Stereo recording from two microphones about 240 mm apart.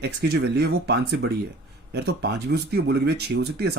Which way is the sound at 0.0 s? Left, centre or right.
Right.